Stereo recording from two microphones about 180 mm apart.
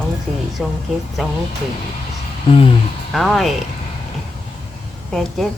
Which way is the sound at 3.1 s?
Centre (ahead or behind).